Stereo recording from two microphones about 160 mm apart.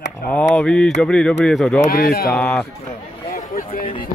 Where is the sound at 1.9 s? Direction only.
70° left (ahead or behind).